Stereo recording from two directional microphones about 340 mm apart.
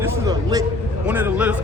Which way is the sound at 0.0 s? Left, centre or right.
Centre.